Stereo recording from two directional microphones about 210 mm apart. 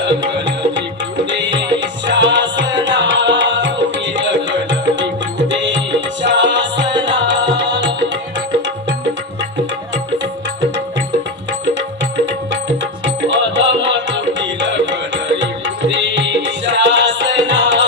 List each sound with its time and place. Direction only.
1.3 s music: 55° right (ahead or behind)
12.2 s music: 60° right (ahead or behind)